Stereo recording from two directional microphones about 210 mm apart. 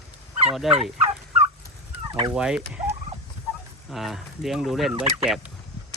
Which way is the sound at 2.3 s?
5° right (ahead or behind).